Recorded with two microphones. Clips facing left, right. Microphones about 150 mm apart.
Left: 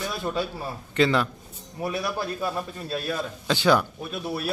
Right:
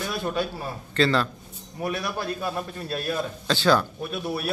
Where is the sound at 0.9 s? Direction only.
15° left (ahead or behind).